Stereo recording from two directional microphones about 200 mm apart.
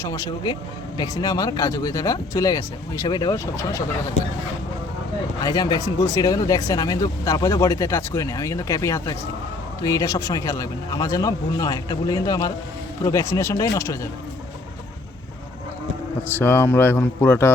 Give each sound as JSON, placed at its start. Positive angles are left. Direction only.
{"t": 0.0, "sound": "speech", "side_deg": 15}
{"t": 5.4, "sound": "speech", "side_deg": 20}
{"t": 16.4, "sound": "speech", "side_deg": 10}